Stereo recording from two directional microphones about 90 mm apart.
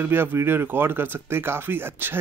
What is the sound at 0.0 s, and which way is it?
Speech, 25° right (ahead or behind).